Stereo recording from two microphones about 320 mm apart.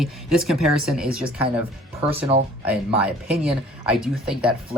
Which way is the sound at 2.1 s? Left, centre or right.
Centre.